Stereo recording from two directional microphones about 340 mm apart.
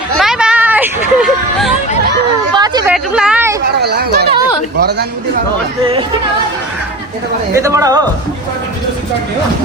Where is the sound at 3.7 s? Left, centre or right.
Right.